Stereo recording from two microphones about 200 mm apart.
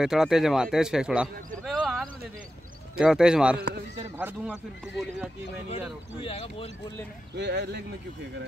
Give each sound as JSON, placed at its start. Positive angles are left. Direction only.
{"t": 0.0, "sound": "speech", "side_deg": 0}
{"t": 1.6, "sound": "a sound", "side_deg": 0}
{"t": 3.0, "sound": "speech", "side_deg": -5}
{"t": 6.2, "sound": "speech", "side_deg": 30}
{"t": 7.3, "sound": "speech", "side_deg": -55}